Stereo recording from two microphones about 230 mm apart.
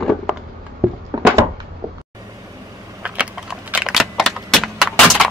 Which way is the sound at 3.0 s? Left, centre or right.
Centre.